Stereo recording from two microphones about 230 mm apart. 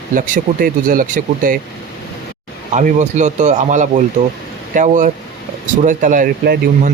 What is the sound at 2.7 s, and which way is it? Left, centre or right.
Speech, right.